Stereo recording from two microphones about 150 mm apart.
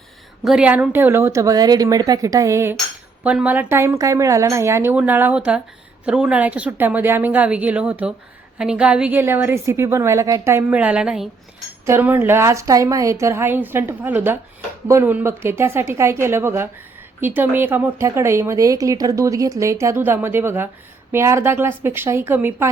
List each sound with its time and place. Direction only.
0.4 s a woman's voice: 5° right (ahead or behind)